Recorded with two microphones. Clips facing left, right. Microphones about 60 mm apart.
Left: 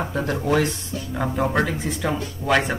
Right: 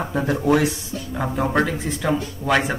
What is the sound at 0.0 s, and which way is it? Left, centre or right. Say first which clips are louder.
Speech: right 3 dB; centre.